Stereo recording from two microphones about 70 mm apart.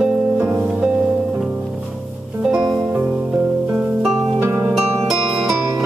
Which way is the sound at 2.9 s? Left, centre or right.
Centre.